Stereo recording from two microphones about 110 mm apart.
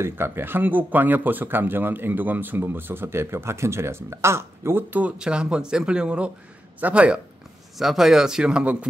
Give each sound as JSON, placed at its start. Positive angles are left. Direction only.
{"t": 0.0, "sound": "a man's voice", "side_deg": -20}